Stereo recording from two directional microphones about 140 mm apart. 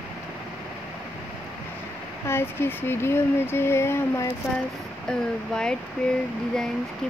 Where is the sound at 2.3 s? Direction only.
15° left (ahead or behind).